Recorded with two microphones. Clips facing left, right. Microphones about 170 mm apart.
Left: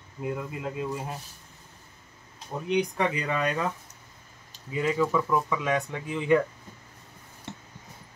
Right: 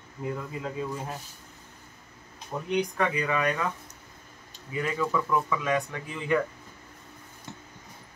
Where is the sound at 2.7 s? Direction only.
25° left (ahead or behind).